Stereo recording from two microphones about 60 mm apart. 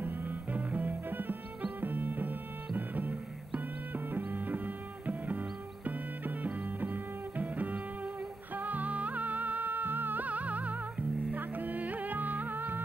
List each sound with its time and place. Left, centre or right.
0.0 s music: right